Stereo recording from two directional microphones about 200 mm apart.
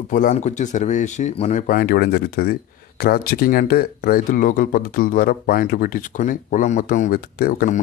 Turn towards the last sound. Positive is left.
turn(degrees=45)  # may be behind; listen again after turning